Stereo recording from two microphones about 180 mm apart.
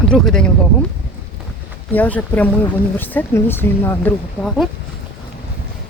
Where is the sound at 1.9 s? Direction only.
10° left (ahead or behind).